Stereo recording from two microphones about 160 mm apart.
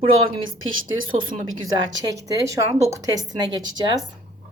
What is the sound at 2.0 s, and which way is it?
A woman's voice, 20° right (ahead or behind).